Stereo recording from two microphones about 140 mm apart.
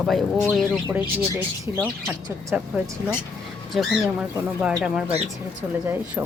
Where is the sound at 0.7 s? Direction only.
15° right (ahead or behind).